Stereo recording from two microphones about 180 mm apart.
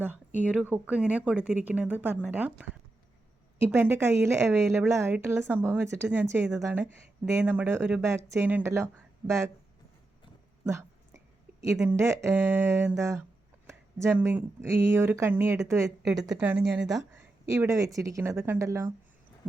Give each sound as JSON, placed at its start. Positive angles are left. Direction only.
{"t": 0.3, "sound": "speech", "side_deg": -5}
{"t": 3.7, "sound": "speech", "side_deg": -10}
{"t": 10.6, "sound": "a sound", "side_deg": -15}
{"t": 11.8, "sound": "speech", "side_deg": -15}
{"t": 17.6, "sound": "speech", "side_deg": -20}